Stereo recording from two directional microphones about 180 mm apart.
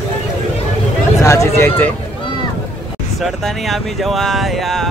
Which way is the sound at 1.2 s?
15° left (ahead or behind).